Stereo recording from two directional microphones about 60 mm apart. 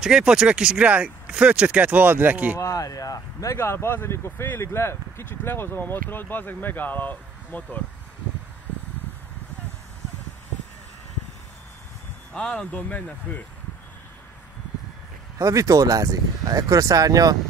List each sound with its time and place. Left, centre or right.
0.0 s speech: centre
2.6 s speech: left
3.5 s speech: left
12.4 s speech: centre
12.7 s speech: left
15.3 s speech: right